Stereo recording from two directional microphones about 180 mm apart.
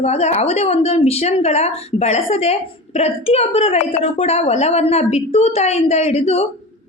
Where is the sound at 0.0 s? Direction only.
40° left (ahead or behind).